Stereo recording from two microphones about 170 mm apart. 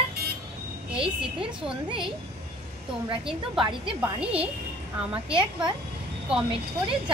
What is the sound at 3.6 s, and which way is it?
Speech, 30° right (ahead or behind).